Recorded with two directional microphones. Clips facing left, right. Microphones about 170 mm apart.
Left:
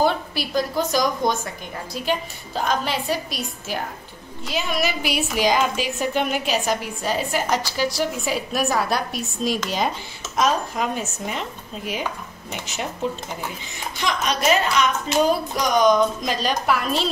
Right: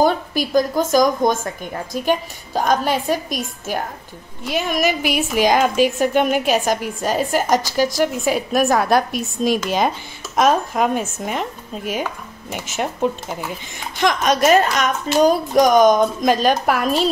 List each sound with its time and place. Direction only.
0.0 s a woman's voice: 45° right (ahead or behind)